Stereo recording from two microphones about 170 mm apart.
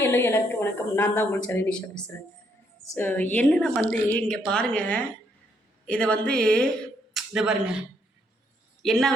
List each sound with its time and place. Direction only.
0.0 s a woman's voice: 15° left (ahead or behind); by 7.8 s 5° right (ahead or behind)
8.8 s speech: centre (ahead or behind)